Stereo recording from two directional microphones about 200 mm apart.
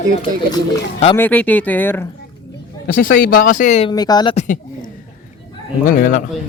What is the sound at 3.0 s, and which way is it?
Speech, 45° left (ahead or behind).